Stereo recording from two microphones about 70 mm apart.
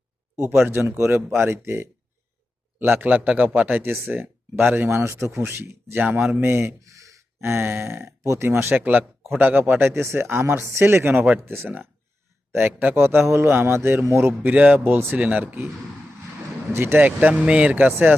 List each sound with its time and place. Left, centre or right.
0.6 s speech: right
6.8 s gasp: right
7.4 s speech: right
8.2 s speech: right
8.7 s speech: right
9.9 s speech: right
13.2 s speech: right
14.4 s speech: centre
16.7 s speech: right